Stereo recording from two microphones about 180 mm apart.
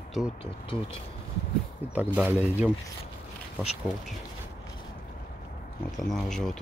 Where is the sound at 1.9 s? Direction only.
10° right (ahead or behind).